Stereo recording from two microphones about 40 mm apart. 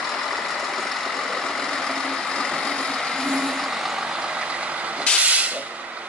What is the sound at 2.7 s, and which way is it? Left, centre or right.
Vehicle, centre.